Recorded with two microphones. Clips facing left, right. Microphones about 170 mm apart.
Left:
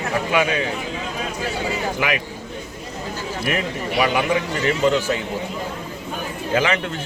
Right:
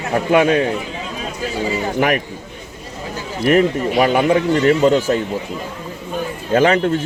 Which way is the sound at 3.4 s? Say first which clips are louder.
Right 12 dB; 45° right (ahead or behind).